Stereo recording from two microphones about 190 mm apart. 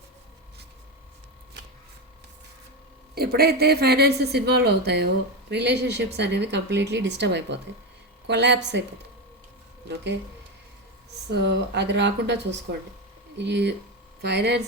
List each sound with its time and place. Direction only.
3.2 s speech: 55° right (ahead or behind)
11.3 s speech: 60° right (ahead or behind)